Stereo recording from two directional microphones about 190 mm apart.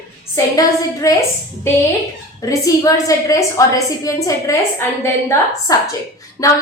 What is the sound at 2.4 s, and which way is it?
A woman's voice, 20° left (ahead or behind).